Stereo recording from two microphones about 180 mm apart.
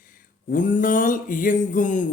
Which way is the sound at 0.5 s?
50° left (ahead or behind).